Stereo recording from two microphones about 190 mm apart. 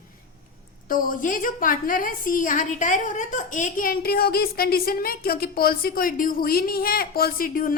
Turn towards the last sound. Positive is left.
turn(degrees=45)  # may be behind; listen again after turning